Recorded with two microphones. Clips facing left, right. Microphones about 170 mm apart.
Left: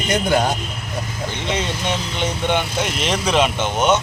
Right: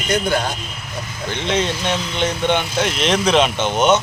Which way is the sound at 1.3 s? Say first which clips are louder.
Right 5 dB; 5° left (ahead or behind).